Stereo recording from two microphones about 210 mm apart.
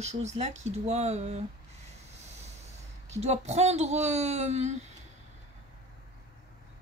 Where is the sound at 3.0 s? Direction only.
30° right (ahead or behind).